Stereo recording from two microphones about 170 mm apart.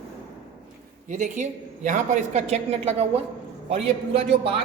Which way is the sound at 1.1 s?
45° right (ahead or behind).